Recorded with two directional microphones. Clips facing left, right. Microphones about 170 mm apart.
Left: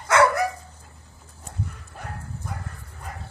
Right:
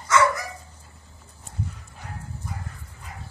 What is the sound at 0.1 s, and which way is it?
Dog, 60° left (ahead or behind).